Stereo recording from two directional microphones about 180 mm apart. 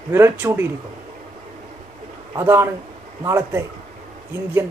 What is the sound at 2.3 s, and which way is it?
A man's voice, 15° right (ahead or behind).